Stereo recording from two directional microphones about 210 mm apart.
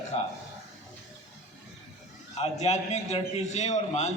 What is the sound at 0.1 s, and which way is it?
Speech, 30° left (ahead or behind).